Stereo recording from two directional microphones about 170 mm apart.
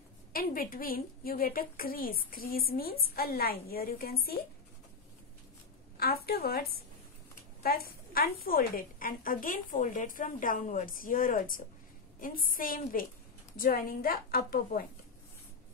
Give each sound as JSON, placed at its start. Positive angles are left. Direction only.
{"t": 0.3, "sound": "a woman's voice", "side_deg": 60}
{"t": 5.9, "sound": "a woman's voice", "side_deg": 60}
{"t": 7.6, "sound": "a woman's voice", "side_deg": 60}